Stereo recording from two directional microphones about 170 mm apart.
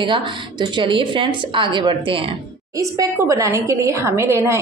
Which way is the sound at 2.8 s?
20° right (ahead or behind).